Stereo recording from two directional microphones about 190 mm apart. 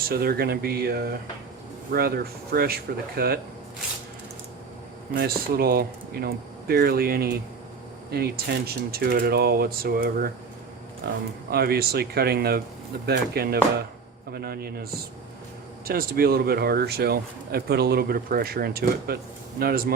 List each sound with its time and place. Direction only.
0.1 s speech: 55° right (ahead or behind)
5.1 s speech: 50° right (ahead or behind)
15.9 s speech: 50° right (ahead or behind)